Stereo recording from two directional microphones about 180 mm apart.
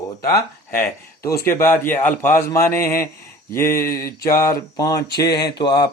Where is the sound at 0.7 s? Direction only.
15° left (ahead or behind).